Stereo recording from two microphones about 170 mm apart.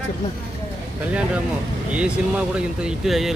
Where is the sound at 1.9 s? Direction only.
5° right (ahead or behind).